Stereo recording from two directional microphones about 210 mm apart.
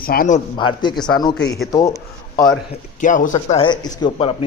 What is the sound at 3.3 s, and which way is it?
Speech, 25° left (ahead or behind).